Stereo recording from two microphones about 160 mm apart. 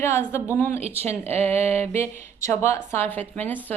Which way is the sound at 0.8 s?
40° right (ahead or behind).